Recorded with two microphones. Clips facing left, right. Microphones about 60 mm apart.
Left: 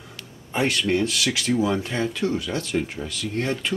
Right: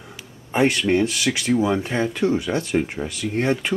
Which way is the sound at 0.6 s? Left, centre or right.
Centre.